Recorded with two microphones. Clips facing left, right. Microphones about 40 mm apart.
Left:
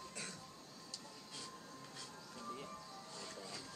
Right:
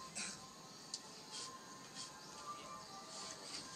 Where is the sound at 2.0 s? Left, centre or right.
Centre.